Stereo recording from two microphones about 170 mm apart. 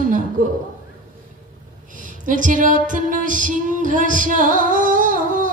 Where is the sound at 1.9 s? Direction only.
50° right (ahead or behind).